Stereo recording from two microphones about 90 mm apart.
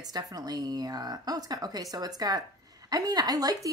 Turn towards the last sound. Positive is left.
turn(degrees=-40)  # may be behind; listen again after turning